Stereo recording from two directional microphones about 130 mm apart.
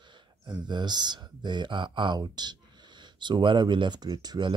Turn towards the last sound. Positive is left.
turn(degrees=-35)  # may be behind; listen again after turning